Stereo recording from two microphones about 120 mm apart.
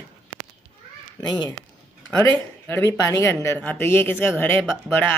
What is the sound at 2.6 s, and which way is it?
Speech, 20° left (ahead or behind).